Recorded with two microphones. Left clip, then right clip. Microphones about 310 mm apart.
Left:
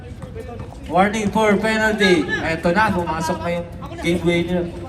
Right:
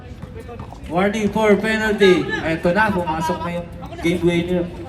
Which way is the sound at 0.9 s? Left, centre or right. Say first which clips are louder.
Left 2 dB; centre.